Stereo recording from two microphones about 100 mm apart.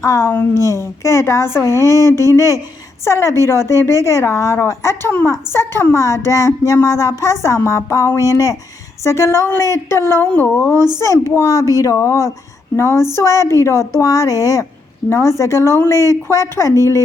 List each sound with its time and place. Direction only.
0.0 s a woman's voice: 35° left (ahead or behind)